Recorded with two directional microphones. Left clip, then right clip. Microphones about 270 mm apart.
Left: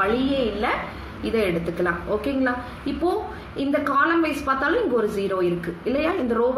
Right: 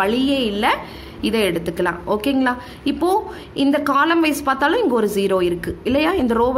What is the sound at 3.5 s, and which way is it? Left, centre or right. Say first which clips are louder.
A woman's voice: right 5 dB; right.